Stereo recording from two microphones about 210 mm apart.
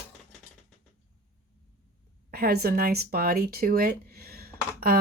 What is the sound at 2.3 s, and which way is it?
Speech, 50° right (ahead or behind).